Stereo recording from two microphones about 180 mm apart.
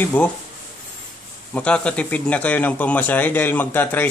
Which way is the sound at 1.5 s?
5° left (ahead or behind).